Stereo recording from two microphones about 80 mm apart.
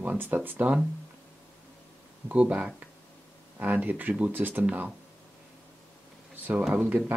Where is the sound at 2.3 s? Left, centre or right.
Centre.